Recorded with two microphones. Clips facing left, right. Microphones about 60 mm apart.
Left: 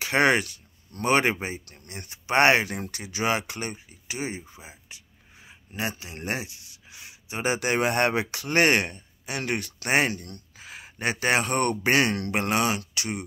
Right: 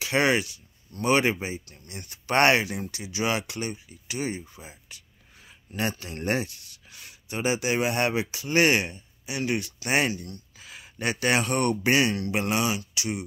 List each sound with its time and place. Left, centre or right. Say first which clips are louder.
0.0 s speech: left 2 dB; left
2.2 s speech: left 1 dB; centre
2.5 s speech: left 1 dB; left
4.2 s speech: right 2 dB; left
7.4 s speech: left 1 dB; left
10.6 s speech: left 1 dB; left